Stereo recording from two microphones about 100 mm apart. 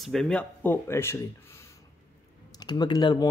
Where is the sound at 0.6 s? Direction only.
25° left (ahead or behind).